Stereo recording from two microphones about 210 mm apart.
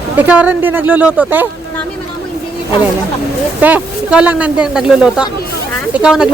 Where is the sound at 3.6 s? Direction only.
10° right (ahead or behind).